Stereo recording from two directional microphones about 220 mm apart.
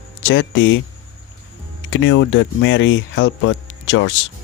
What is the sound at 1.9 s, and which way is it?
Speech, 60° left (ahead or behind).